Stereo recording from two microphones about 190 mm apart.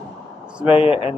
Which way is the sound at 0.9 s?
30° left (ahead or behind).